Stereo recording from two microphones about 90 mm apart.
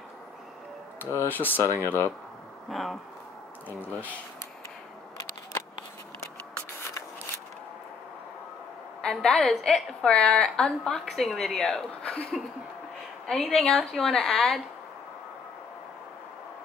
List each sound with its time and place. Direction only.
0.9 s speech: 25° left (ahead or behind)
1.6 s speech: 35° right (ahead or behind)
2.7 s a woman's voice: centre (ahead or behind)
3.6 s speech: 20° left (ahead or behind)
9.0 s a woman's voice: 10° left (ahead or behind)